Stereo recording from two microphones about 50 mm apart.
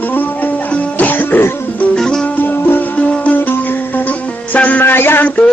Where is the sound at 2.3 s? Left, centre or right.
Left.